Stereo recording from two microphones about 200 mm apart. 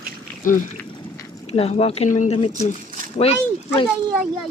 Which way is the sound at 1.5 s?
30° left (ahead or behind).